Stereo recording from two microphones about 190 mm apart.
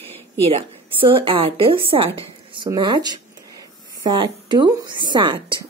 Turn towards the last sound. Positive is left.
turn(degrees=-25)  # may be behind; listen again after turning